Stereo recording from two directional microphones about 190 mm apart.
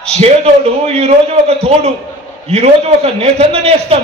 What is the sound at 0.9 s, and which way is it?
A man's voice, 35° right (ahead or behind).